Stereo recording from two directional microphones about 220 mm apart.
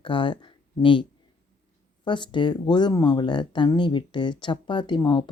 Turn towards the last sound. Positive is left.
turn(degrees=20)  # may be behind; listen again after turning